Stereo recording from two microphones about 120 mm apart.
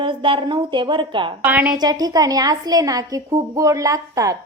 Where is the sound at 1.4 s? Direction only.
10° right (ahead or behind).